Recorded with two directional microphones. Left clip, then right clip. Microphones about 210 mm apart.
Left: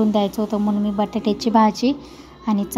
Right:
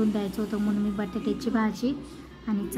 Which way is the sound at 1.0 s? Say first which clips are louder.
Left 9 dB; 30° left (ahead or behind).